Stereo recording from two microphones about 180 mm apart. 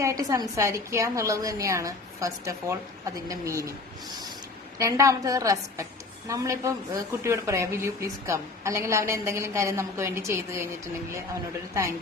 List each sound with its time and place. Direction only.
0.0 s a woman's voice: 20° right (ahead or behind)
4.8 s a woman's voice: 15° right (ahead or behind)